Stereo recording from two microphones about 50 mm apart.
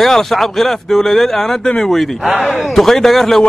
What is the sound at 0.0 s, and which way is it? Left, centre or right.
A man's voice, centre.